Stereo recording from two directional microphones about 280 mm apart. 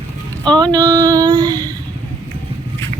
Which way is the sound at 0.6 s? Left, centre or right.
Centre.